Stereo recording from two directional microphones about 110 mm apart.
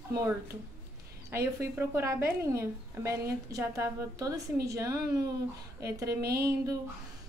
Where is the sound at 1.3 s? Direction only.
25° right (ahead or behind).